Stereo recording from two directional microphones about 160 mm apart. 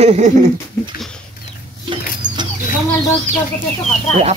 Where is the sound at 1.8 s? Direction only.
30° right (ahead or behind).